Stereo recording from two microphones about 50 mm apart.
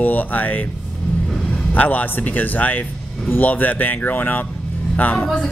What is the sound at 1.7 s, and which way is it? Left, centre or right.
A man's voice, left.